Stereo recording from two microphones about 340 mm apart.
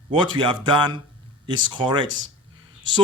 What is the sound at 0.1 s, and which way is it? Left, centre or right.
Speech, centre.